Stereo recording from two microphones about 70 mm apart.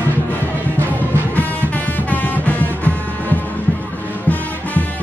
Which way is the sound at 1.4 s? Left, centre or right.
Left.